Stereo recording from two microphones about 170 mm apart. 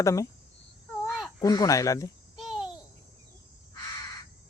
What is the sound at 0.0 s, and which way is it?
Speech, 20° left (ahead or behind).